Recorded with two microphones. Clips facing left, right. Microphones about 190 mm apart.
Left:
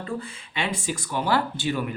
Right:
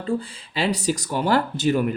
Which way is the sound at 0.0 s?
35° right (ahead or behind).